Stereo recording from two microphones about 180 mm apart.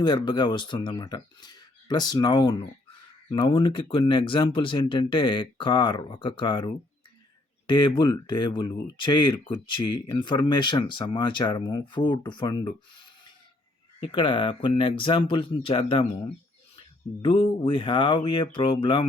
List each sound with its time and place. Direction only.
0.0 s speech: 25° left (ahead or behind)
17.2 s speech: 30° left (ahead or behind)